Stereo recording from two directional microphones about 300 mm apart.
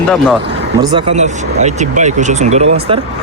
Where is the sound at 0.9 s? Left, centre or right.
Right.